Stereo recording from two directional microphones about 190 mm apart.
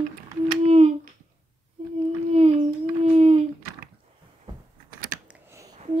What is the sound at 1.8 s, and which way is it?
Child singing, 30° right (ahead or behind).